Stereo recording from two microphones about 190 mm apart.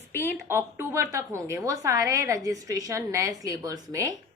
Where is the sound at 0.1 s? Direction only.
10° left (ahead or behind).